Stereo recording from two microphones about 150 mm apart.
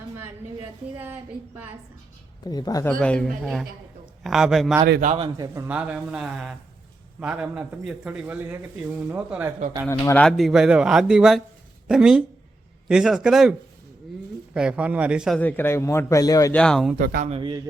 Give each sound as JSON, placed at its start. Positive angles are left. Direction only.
{"t": 0.9, "sound": "a man's voice", "side_deg": -15}
{"t": 2.5, "sound": "speech", "side_deg": 25}
{"t": 2.8, "sound": "speech", "side_deg": 10}
{"t": 4.9, "sound": "a man's voice", "side_deg": -65}
{"t": 5.6, "sound": "a man's voice", "side_deg": -10}
{"t": 10.2, "sound": "a man's voice", "side_deg": 0}
{"t": 15.4, "sound": "a man's voice", "side_deg": 10}
{"t": 16.5, "sound": "speech", "side_deg": 5}
{"t": 17.0, "sound": "a man's voice", "side_deg": -90}
{"t": 17.2, "sound": "a man's voice", "side_deg": -40}